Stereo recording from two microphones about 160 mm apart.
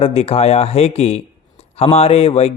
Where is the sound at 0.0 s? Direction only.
40° left (ahead or behind).